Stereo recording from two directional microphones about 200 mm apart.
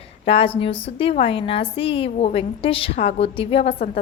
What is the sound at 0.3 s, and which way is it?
A woman's voice, 30° left (ahead or behind).